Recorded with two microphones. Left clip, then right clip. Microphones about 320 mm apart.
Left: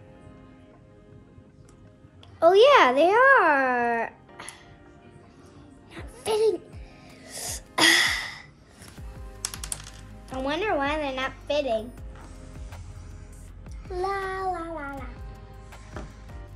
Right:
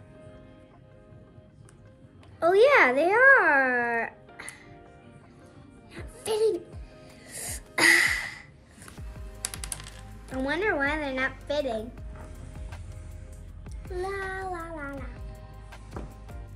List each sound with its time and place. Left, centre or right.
2.4 s a child's voice: centre
5.9 s music: centre
10.3 s a woman's voice: centre
14.0 s child singing: centre